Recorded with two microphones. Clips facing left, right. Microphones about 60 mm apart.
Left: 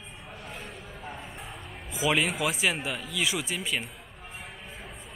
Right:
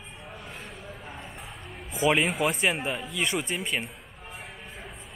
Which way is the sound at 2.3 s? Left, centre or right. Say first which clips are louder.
Right 3 dB; right.